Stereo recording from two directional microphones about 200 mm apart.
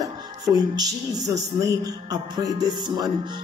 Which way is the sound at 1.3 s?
15° right (ahead or behind).